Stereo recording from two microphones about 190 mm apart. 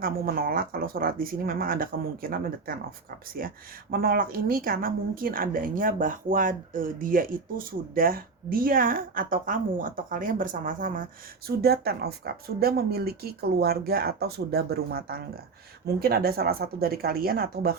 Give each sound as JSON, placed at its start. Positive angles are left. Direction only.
{"t": 0.0, "sound": "a woman's voice", "side_deg": -50}
{"t": 11.4, "sound": "a woman's voice", "side_deg": -55}